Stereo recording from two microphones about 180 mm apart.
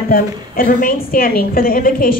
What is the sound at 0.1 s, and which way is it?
A woman's voice, 55° left (ahead or behind).